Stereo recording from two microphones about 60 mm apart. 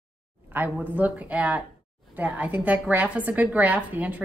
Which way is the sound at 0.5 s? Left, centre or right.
Right.